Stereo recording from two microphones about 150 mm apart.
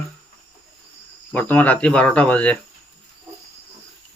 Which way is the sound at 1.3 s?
10° left (ahead or behind).